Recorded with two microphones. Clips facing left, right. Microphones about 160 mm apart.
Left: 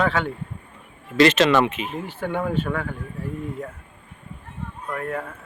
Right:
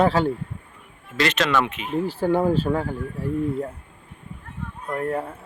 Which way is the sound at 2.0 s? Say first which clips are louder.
Right 7 dB; 35° right (ahead or behind).